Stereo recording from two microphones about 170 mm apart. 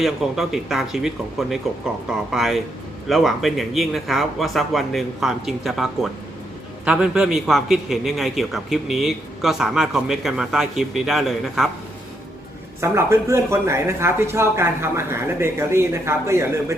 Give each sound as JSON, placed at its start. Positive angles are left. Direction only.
{"t": 0.0, "sound": "a man's voice", "side_deg": 0}
{"t": 12.8, "sound": "speech", "side_deg": -15}